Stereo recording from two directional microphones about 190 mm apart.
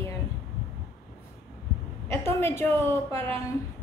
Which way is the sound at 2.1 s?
15° left (ahead or behind).